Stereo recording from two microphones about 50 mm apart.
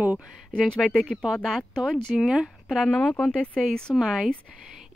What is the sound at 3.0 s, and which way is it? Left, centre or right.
Speech, left.